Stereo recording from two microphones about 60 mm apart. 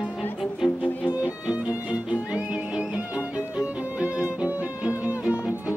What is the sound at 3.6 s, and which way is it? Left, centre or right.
Music, centre.